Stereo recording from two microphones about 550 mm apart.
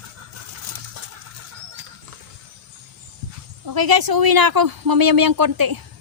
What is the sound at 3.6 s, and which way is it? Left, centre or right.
Speech, right.